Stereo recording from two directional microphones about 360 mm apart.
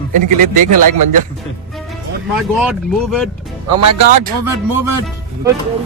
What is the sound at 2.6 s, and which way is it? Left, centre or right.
Speech, centre.